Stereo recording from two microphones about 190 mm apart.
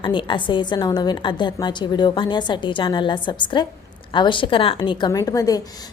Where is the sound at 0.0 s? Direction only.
25° left (ahead or behind).